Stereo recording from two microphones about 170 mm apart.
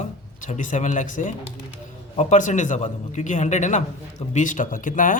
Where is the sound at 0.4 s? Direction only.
50° left (ahead or behind).